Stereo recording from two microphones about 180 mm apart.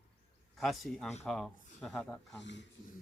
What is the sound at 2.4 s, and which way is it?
Speech, 75° left (ahead or behind).